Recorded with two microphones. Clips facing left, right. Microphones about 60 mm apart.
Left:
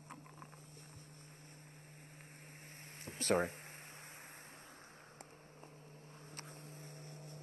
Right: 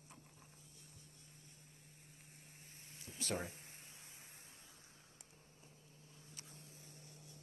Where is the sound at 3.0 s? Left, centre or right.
Left.